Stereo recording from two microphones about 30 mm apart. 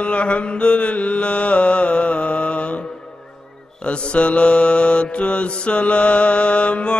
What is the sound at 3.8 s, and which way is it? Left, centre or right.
Mantra, left.